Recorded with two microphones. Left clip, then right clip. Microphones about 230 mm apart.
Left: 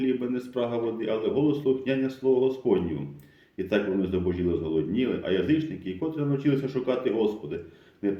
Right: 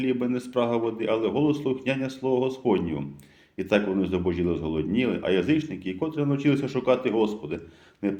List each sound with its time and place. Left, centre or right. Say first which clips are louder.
0.0 s a man's voice: right 1 dB; right